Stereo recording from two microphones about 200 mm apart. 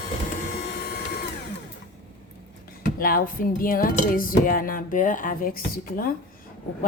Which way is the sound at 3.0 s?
45° left (ahead or behind).